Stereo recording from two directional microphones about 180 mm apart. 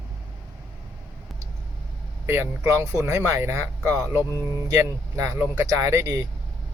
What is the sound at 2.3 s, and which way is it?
Speech, 15° right (ahead or behind).